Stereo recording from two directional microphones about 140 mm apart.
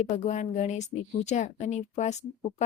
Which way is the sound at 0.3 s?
55° left (ahead or behind).